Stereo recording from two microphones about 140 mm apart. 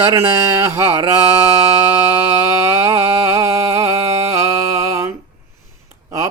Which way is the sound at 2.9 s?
20° right (ahead or behind).